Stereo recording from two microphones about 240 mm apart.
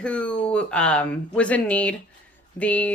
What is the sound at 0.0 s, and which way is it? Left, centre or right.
Speech, centre.